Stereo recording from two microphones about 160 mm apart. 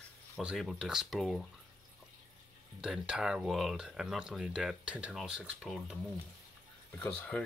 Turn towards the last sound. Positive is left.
turn(degrees=10)  # may be behind; listen again after turning